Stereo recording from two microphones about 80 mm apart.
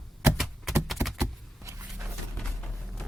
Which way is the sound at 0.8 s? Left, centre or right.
Centre.